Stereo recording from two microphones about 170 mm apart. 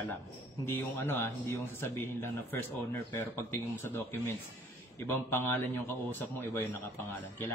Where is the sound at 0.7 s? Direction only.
15° left (ahead or behind).